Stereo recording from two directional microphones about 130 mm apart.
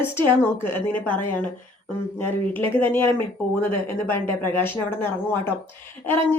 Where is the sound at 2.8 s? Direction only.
15° left (ahead or behind).